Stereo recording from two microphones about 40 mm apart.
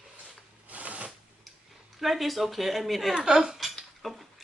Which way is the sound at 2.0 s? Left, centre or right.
Centre.